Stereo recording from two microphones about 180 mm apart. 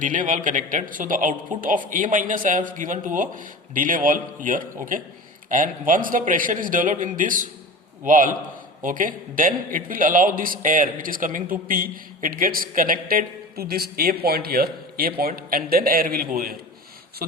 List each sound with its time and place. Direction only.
0.0 s a man's voice: 45° right (ahead or behind)